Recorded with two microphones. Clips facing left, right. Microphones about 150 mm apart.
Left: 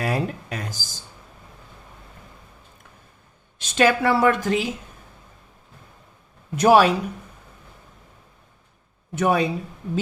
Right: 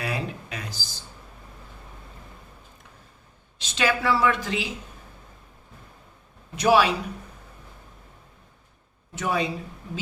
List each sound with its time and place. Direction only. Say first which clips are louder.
0.0 s a sound: left 5 dB; 45° left (ahead or behind)
3.6 s a woman's voice: left 6 dB; 50° left (ahead or behind)
6.6 s a woman's voice: left 4 dB; 45° left (ahead or behind)
9.1 s a woman's voice: left 6 dB; 55° left (ahead or behind)